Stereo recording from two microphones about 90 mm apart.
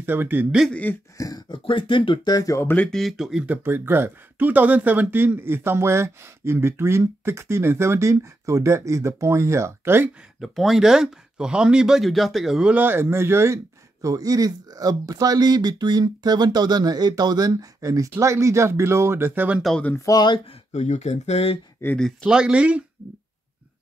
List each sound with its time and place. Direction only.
0.0 s a man's voice: 25° right (ahead or behind)
0.7 s speech: 15° left (ahead or behind)
1.1 s a sound: 40° left (ahead or behind)
1.5 s speech: 70° left (ahead or behind)
2.3 s speech: 40° left (ahead or behind)
2.9 s speech: centre (ahead or behind)
3.4 s speech: 25° right (ahead or behind)
10.4 s speech: centre (ahead or behind)
12.7 s speech: 25° right (ahead or behind)
14.0 s speech: 40° right (ahead or behind); by 19.6 s 20° right (ahead or behind)
20.0 s speech: 40° left (ahead or behind)
21.9 s speech: 10° left (ahead or behind)
22.3 s speech: 10° right (ahead or behind)